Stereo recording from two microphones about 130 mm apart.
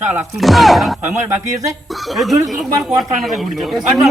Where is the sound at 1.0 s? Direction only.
65° right (ahead or behind).